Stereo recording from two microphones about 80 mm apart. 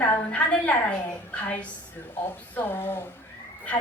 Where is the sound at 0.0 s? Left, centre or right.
Left.